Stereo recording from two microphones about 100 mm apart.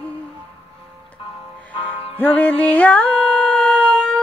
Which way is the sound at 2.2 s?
15° left (ahead or behind).